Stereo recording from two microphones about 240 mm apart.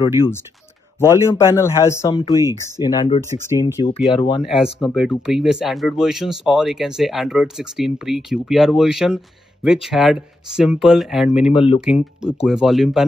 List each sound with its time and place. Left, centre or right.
0.0 s speech: centre
4.4 s speech: centre
11.5 s speech: left
11.8 s speech: centre